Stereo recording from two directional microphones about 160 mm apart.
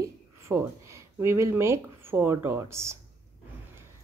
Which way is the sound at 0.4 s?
15° right (ahead or behind).